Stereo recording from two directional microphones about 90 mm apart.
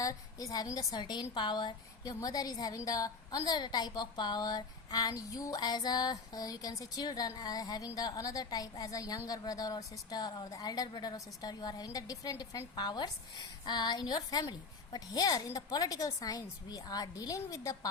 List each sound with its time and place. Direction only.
0.0 s a woman's voice: 40° left (ahead or behind); by 1.7 s 55° left (ahead or behind)
2.0 s a woman's voice: 45° left (ahead or behind)
12.7 s a woman's voice: 55° left (ahead or behind)